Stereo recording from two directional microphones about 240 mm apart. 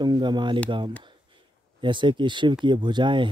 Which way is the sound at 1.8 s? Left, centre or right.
Centre.